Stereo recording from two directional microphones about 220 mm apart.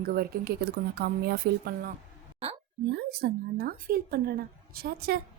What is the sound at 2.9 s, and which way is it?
A woman's voice, 45° right (ahead or behind).